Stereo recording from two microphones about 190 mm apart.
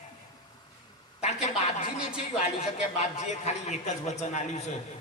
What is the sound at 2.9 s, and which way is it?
A man's voice, 35° left (ahead or behind).